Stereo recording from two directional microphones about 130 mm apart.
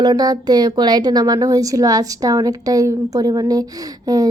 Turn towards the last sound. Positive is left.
turn(degrees=-30)  # may be behind; listen again after turning